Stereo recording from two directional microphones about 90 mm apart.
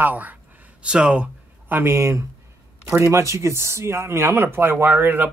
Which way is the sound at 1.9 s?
35° right (ahead or behind).